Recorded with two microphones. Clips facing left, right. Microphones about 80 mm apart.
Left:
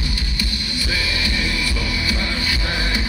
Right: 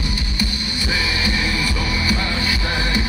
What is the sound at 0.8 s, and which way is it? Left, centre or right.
Music, right.